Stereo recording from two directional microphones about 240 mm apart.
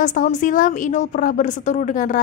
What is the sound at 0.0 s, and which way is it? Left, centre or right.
Speech, left.